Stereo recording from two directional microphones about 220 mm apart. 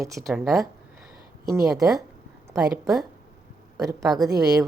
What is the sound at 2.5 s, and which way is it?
A woman's voice, 15° right (ahead or behind).